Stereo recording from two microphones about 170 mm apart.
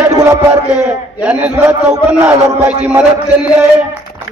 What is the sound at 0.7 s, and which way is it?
A man's voice, 5° right (ahead or behind).